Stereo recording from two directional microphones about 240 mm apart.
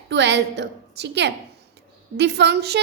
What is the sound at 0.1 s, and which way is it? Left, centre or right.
A woman's voice, right.